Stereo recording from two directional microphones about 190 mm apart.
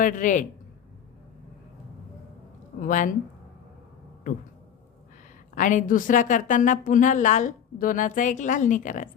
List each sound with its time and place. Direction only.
0.0 s a woman's voice: 45° left (ahead or behind)
2.8 s a woman's voice: 45° left (ahead or behind)
4.3 s a woman's voice: 45° left (ahead or behind)
5.5 s a woman's voice: 45° left (ahead or behind)